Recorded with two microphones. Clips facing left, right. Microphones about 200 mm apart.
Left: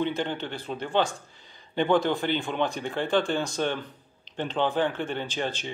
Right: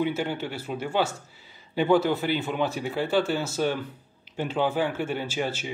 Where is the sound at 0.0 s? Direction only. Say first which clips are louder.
Right 1 dB; 10° right (ahead or behind).